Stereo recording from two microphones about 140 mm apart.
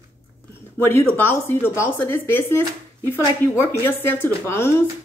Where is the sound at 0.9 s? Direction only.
15° left (ahead or behind).